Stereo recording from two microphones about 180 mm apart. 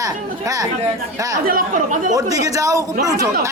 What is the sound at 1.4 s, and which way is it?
Speech, 50° right (ahead or behind).